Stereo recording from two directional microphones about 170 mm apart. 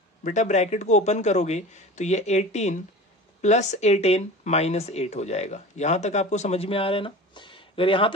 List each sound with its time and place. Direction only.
0.2 s a man's voice: 45° left (ahead or behind)